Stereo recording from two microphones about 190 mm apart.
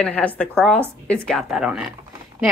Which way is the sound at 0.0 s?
5° left (ahead or behind).